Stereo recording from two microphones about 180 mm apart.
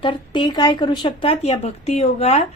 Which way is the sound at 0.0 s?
25° left (ahead or behind).